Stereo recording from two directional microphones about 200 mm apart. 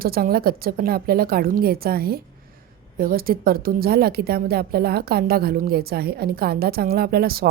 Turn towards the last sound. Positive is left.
turn(degrees=-50)  # may be behind; listen again after turning